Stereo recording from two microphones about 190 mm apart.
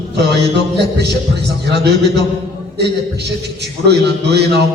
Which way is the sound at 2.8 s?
60° right (ahead or behind).